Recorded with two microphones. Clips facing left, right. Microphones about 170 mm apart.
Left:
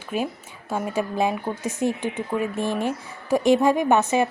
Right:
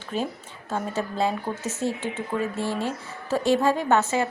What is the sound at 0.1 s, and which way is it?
Speech, 10° left (ahead or behind).